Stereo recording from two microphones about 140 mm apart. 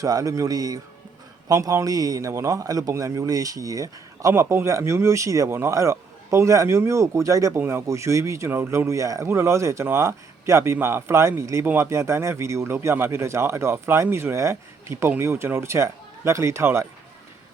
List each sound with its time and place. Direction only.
0.0 s a man's voice: 25° right (ahead or behind)